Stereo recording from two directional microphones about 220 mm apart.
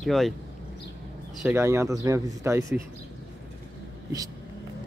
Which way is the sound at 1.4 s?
10° right (ahead or behind).